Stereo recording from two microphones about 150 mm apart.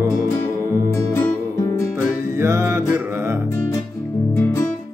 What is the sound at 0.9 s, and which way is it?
Music, 15° left (ahead or behind).